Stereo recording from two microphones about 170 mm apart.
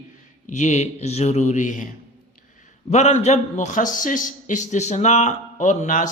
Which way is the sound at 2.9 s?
40° left (ahead or behind).